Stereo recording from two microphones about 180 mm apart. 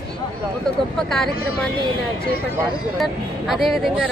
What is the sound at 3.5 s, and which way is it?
Speech, centre (ahead or behind).